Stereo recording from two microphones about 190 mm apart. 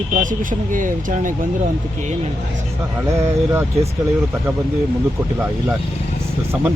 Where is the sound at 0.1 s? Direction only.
45° right (ahead or behind).